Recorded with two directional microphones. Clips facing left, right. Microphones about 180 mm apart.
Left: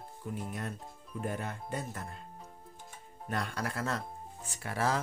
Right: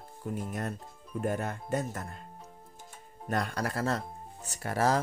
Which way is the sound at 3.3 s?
40° right (ahead or behind).